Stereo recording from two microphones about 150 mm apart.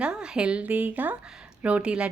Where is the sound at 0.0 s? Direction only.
5° right (ahead or behind).